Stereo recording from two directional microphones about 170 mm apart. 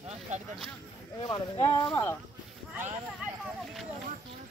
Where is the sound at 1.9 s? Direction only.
15° left (ahead or behind).